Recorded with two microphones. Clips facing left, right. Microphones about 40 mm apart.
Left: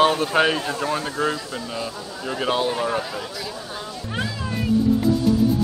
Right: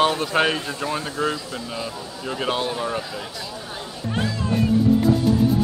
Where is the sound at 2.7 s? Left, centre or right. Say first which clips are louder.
Left 3 dB; centre.